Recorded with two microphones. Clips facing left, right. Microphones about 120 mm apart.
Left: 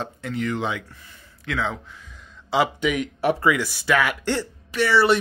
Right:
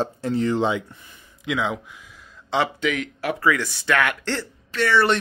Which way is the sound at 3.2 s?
25° left (ahead or behind).